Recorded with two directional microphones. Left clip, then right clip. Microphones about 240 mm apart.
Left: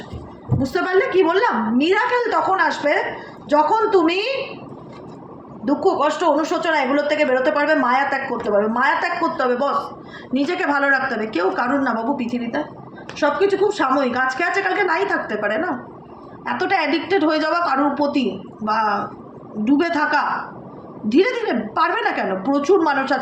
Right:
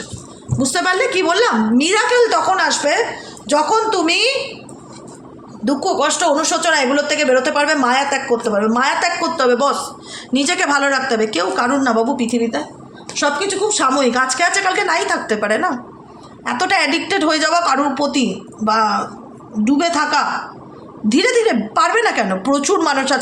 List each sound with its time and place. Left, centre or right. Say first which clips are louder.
0.6 s speech: right 3 dB; right
5.6 s a woman's voice: right 1 dB; right